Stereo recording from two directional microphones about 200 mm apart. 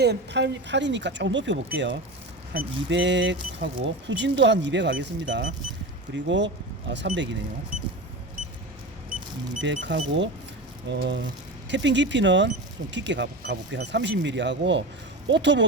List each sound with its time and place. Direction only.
0.0 s speech: 55° right (ahead or behind)
9.6 s speech: 65° right (ahead or behind)